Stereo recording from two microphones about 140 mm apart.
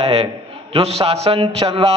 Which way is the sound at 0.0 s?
45° right (ahead or behind).